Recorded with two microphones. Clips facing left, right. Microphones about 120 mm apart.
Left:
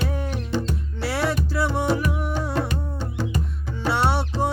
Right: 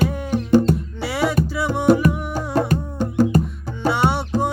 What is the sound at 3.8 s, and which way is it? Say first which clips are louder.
Music: right 3 dB; centre (ahead or behind).